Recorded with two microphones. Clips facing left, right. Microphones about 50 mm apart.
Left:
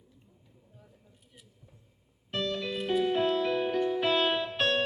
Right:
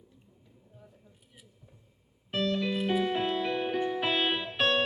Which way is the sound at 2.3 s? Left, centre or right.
Centre.